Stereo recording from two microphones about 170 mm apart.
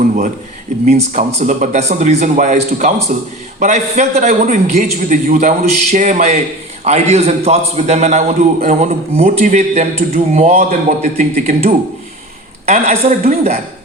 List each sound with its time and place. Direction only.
0.9 s a man's voice: 40° right (ahead or behind)